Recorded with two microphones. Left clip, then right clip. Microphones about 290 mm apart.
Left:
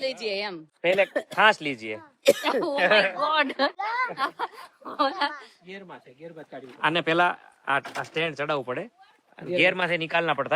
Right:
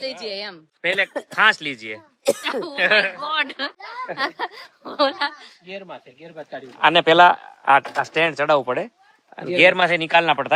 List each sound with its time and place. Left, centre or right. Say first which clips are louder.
0.2 s speech: even; left
0.8 s speech: right 1 dB; centre
4.1 s speech: right 4 dB; right
5.6 s speech: right 7 dB; centre